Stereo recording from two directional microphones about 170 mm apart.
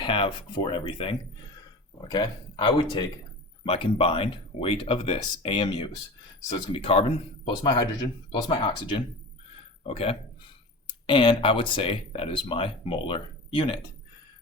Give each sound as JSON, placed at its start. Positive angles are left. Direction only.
{"t": 0.0, "sound": "speech", "side_deg": 30}